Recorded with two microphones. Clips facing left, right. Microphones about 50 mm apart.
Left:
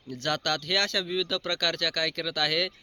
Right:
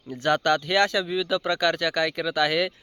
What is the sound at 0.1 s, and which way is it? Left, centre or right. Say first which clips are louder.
Speech: right 7 dB; centre.